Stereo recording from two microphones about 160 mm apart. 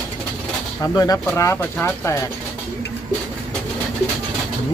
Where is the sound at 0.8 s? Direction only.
25° left (ahead or behind).